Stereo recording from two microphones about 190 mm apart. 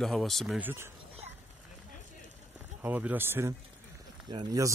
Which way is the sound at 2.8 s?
10° right (ahead or behind).